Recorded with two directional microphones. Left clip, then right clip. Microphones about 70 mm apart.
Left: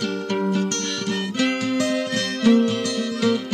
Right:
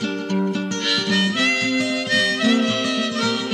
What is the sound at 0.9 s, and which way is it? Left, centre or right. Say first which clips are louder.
Harmonica: right 7 dB; left.